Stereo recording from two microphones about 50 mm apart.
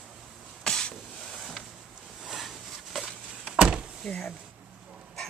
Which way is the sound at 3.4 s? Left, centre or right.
Right.